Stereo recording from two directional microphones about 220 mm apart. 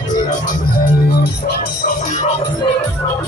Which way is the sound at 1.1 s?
45° left (ahead or behind).